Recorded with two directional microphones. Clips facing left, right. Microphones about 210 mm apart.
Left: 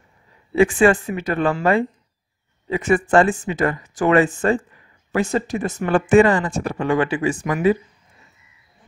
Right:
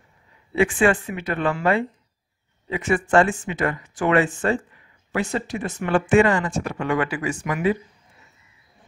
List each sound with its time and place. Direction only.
0.6 s speech: 40° left (ahead or behind)
7.4 s speech: 40° left (ahead or behind)